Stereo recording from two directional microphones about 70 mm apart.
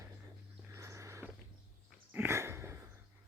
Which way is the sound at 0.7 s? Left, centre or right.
Right.